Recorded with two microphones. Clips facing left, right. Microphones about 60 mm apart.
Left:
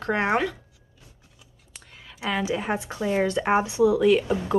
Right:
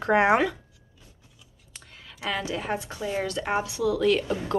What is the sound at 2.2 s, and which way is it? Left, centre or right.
A woman's voice, centre.